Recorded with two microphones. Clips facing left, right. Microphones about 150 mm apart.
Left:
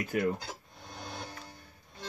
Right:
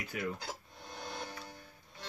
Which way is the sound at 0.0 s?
45° left (ahead or behind).